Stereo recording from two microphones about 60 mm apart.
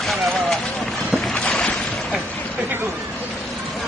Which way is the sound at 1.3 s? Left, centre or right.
Centre.